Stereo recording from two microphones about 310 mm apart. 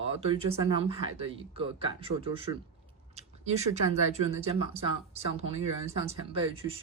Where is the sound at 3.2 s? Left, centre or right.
Right.